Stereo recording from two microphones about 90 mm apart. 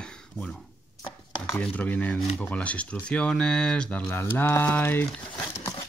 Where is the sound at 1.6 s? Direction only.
15° left (ahead or behind).